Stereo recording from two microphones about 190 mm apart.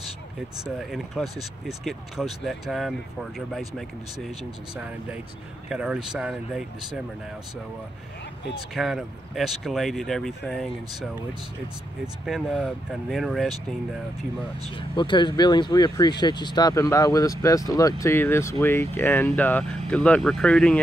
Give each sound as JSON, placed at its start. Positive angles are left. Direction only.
{"t": 0.7, "sound": "speech", "side_deg": 0}
{"t": 5.7, "sound": "speech", "side_deg": -5}
{"t": 8.7, "sound": "speech", "side_deg": 0}
{"t": 12.3, "sound": "speech", "side_deg": 0}
{"t": 14.8, "sound": "speech", "side_deg": 25}